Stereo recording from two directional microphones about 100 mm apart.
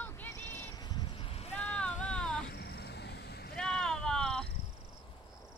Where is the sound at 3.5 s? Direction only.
5° left (ahead or behind).